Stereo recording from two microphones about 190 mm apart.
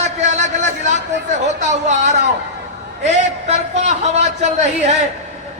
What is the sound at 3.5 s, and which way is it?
A man's voice, 35° right (ahead or behind).